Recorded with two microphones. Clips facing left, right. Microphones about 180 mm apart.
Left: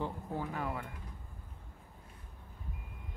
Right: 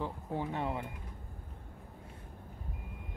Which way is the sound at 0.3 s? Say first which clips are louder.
Right 6 dB; 25° right (ahead or behind).